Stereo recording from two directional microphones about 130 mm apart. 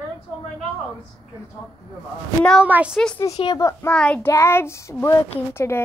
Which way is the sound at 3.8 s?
10° left (ahead or behind).